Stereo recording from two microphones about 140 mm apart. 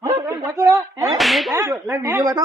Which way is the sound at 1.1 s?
Centre (ahead or behind).